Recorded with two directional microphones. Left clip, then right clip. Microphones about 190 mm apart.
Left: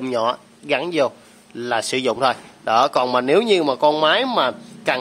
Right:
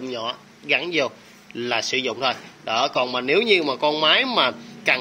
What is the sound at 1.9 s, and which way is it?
A man's voice, 30° left (ahead or behind).